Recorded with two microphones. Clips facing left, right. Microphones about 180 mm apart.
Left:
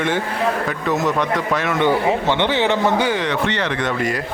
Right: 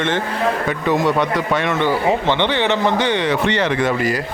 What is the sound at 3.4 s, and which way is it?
Speech, 15° right (ahead or behind).